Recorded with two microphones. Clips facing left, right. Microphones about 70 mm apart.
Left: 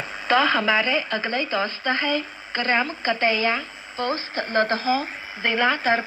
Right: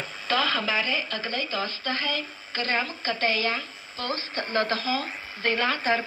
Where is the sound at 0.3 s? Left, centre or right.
Left.